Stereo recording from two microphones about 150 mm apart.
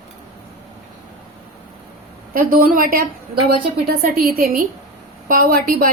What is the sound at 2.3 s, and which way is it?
A woman's voice, 65° right (ahead or behind).